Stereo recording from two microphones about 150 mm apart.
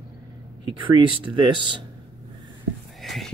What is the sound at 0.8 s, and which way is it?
Speech, 35° right (ahead or behind).